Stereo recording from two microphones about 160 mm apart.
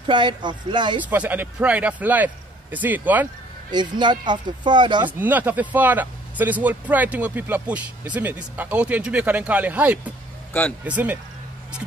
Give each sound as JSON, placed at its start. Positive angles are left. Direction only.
{"t": 0.0, "sound": "speech", "side_deg": -30}
{"t": 1.0, "sound": "speech", "side_deg": -10}
{"t": 3.7, "sound": "speech", "side_deg": -30}
{"t": 5.2, "sound": "speech", "side_deg": -10}